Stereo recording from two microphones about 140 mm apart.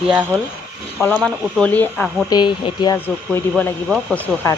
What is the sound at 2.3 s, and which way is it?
Speech, 30° left (ahead or behind).